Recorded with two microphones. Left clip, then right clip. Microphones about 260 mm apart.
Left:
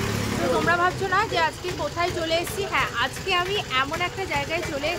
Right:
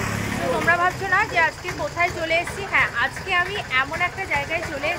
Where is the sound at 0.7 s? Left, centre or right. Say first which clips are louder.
Right 5 dB; centre.